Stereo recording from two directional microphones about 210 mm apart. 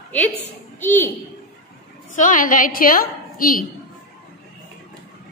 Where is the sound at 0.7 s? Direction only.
10° left (ahead or behind).